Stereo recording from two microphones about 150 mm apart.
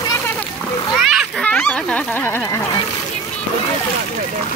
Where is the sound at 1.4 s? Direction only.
10° left (ahead or behind).